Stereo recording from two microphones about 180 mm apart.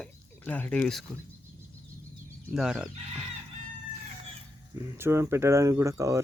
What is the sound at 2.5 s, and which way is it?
Speech, 5° right (ahead or behind).